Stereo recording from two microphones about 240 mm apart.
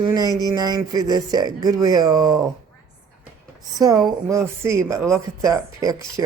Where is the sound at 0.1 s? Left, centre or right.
Centre.